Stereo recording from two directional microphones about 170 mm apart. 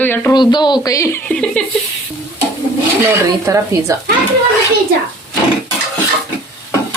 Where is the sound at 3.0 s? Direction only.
15° right (ahead or behind).